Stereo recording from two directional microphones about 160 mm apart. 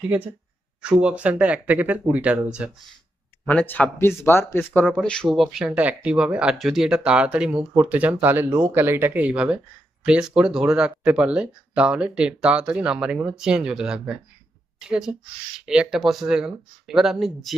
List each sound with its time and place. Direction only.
1.0 s speech: 10° right (ahead or behind)
3.4 s speech: 10° left (ahead or behind)
4.9 s speech: centre (ahead or behind)